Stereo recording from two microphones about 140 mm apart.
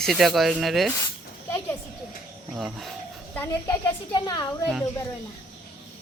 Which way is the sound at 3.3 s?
15° left (ahead or behind).